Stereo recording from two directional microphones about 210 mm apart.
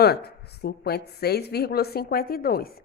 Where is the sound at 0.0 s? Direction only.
50° left (ahead or behind).